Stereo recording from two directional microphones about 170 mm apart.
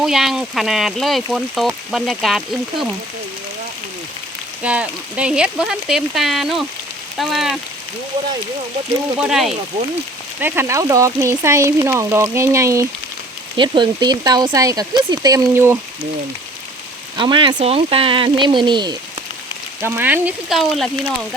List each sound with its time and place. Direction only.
0.0 s speech: centre (ahead or behind)
4.6 s speech: 5° right (ahead or behind)
9.1 s speech: 5° right (ahead or behind)
10.4 s speech: 15° right (ahead or behind)
13.6 s speech: 30° right (ahead or behind)
17.2 s speech: 30° right (ahead or behind)
19.8 s speech: 10° right (ahead or behind)